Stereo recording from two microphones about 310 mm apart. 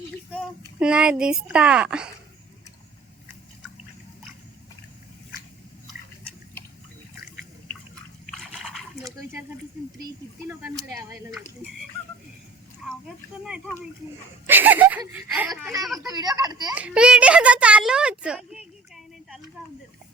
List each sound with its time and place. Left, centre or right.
0.8 s speech: centre
8.3 s trickle: centre
10.9 s speech: centre
13.4 s speech: centre